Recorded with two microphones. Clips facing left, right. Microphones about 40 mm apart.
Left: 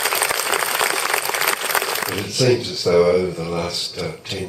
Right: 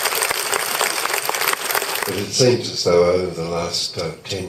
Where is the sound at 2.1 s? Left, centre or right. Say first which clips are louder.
Right 2 dB; centre.